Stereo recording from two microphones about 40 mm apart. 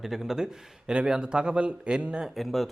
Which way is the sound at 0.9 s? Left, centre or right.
Right.